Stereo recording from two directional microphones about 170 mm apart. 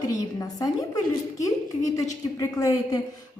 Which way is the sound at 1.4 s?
20° left (ahead or behind).